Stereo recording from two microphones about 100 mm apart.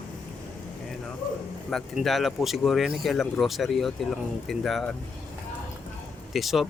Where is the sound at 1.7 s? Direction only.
Centre (ahead or behind).